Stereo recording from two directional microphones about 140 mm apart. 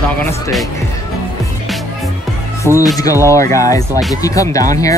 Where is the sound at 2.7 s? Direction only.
15° right (ahead or behind).